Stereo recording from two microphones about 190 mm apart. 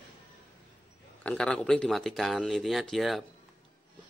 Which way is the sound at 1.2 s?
5° left (ahead or behind).